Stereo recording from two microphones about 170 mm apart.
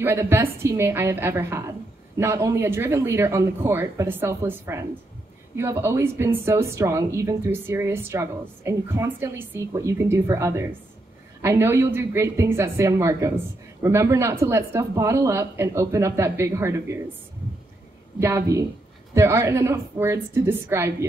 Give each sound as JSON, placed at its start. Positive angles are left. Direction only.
{"t": 0.0, "sound": "a woman's voice", "side_deg": -15}
{"t": 18.2, "sound": "a woman's voice", "side_deg": -20}